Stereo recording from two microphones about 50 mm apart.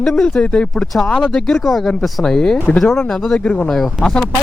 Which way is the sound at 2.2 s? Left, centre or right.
Centre.